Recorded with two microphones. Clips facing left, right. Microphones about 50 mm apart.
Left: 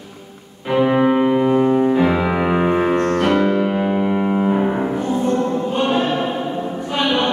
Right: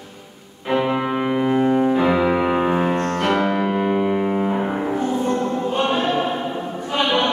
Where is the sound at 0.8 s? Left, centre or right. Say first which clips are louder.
Left 8 dB; centre.